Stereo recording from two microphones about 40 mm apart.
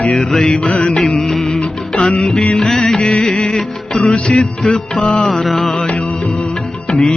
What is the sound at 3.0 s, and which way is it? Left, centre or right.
Music of bollywood, left.